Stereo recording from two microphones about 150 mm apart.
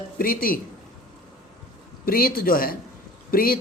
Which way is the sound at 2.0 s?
70° left (ahead or behind).